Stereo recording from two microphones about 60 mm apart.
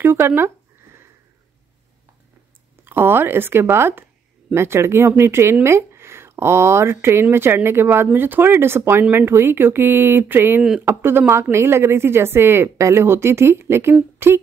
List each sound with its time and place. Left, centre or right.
0.0 s speech: right
2.8 s speech: right